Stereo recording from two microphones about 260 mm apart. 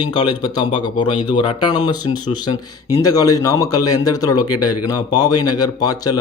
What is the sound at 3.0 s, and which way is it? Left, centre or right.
Speech, centre.